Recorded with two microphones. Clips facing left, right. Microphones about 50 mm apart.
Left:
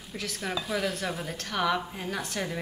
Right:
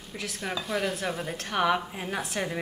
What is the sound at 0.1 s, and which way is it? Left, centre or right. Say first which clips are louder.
A woman's voice: even; centre.